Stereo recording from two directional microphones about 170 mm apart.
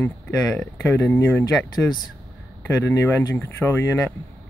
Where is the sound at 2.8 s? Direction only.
15° left (ahead or behind).